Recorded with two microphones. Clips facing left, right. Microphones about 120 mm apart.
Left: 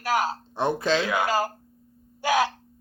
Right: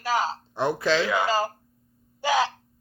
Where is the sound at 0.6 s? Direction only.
20° left (ahead or behind).